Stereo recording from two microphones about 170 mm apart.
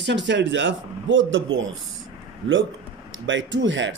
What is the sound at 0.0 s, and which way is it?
Speech, 90° right.